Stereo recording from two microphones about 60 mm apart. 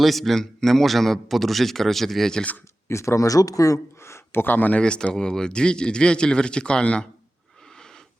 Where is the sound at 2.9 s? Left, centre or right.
Left.